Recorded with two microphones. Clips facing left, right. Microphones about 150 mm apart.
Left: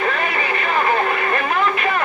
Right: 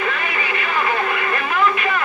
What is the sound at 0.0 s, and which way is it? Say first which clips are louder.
Music: left 3 dB; 40° left (ahead or behind).